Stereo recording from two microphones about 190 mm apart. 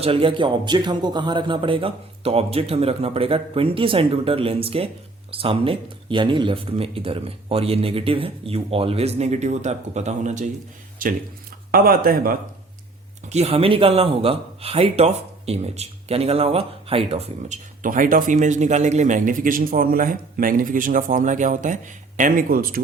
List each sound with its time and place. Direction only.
0.0 s speech: 30° right (ahead or behind); by 12.4 s 50° right (ahead or behind)
13.3 s speech: 35° right (ahead or behind)